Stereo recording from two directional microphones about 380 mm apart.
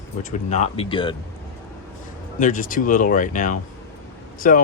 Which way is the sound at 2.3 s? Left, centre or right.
Centre.